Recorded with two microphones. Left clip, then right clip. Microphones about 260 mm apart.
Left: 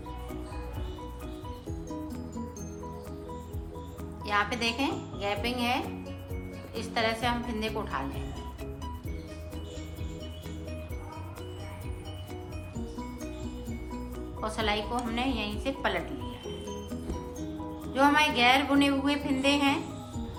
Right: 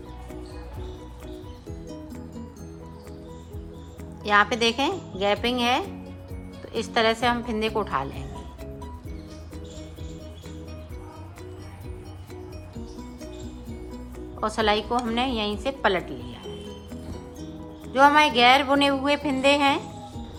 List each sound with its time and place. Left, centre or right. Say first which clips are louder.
4.3 s a woman's voice: right 8 dB; right
6.7 s a woman's voice: right 7 dB; right
14.4 s a woman's voice: right 7 dB; centre
17.9 s a woman's voice: right 7 dB; centre